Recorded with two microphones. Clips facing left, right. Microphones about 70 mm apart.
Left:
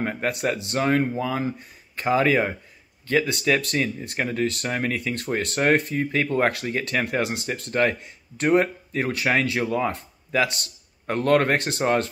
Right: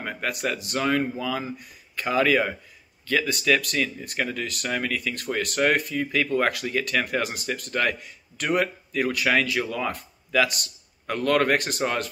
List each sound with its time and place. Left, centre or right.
0.0 s speech: left